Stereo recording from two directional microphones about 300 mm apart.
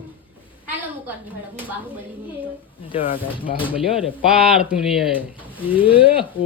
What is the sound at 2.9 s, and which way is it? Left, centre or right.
Speech, centre.